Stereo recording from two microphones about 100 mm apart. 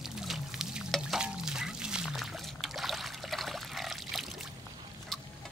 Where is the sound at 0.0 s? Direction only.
5° right (ahead or behind).